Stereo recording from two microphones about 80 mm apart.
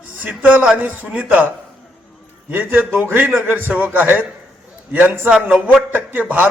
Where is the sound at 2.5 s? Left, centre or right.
Right.